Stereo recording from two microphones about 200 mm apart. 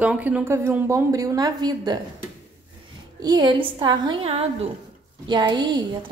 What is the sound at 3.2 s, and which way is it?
A woman's voice, 20° right (ahead or behind).